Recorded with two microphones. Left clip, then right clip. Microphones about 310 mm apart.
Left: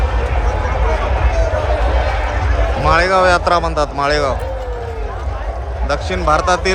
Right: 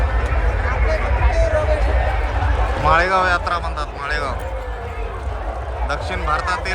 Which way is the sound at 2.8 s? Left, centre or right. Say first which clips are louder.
Left 3 dB; centre.